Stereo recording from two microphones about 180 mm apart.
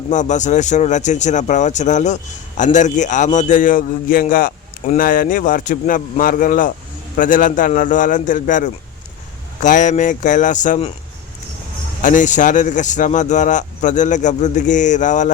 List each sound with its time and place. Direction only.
0.1 s a man's voice: 40° left (ahead or behind)
12.0 s a man's voice: 45° left (ahead or behind)